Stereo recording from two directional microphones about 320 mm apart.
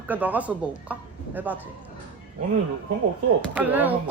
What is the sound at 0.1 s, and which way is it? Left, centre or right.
Speech, centre.